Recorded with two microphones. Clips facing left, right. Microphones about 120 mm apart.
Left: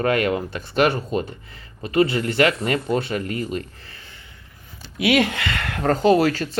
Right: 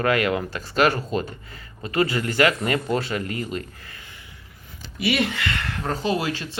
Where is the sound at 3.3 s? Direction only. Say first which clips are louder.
Left 3 dB; 35° left (ahead or behind).